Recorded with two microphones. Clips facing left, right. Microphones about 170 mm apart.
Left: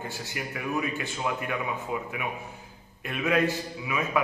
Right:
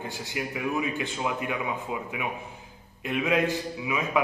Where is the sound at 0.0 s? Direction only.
15° right (ahead or behind).